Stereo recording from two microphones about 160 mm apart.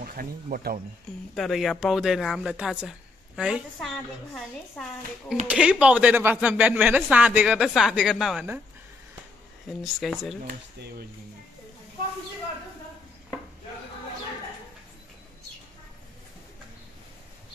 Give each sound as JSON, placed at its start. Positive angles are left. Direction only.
{"t": 0.0, "sound": "speech", "side_deg": -65}
{"t": 1.3, "sound": "speech", "side_deg": 0}
{"t": 9.7, "sound": "speech", "side_deg": 0}